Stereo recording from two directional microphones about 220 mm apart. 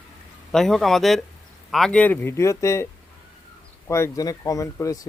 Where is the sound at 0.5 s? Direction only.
Centre (ahead or behind).